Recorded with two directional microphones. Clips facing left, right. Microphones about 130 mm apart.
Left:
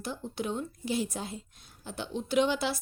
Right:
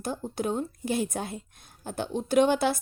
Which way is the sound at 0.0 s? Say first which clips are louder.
Right 4 dB; 45° right (ahead or behind).